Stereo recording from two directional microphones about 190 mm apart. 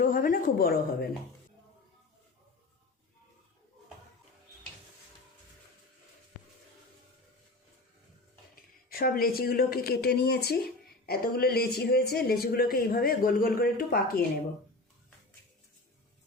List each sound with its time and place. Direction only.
0.0 s speech: 45° left (ahead or behind)
8.9 s speech: 50° left (ahead or behind)